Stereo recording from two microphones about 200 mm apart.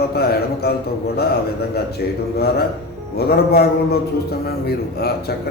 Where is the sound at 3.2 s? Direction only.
50° left (ahead or behind).